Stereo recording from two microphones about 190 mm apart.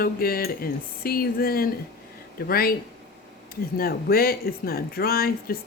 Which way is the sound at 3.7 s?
50° left (ahead or behind).